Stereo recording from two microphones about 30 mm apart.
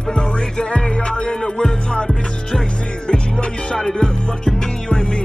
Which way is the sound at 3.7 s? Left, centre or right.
Left.